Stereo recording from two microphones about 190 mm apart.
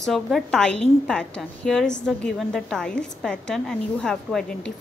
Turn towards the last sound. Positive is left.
turn(degrees=5)  # may be behind; listen again after turning